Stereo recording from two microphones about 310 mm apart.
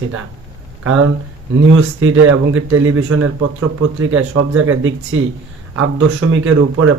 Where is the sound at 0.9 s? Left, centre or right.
Right.